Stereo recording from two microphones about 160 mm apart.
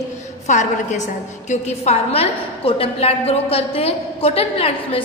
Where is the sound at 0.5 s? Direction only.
50° left (ahead or behind).